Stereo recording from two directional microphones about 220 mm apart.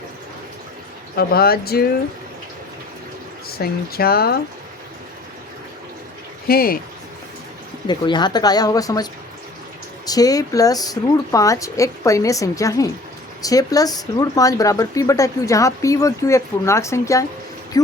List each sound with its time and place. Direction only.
1.1 s speech: 45° left (ahead or behind)
3.6 s speech: 45° left (ahead or behind)
6.5 s speech: 40° left (ahead or behind)
7.9 s speech: 20° left (ahead or behind)
10.1 s speech: 15° left (ahead or behind)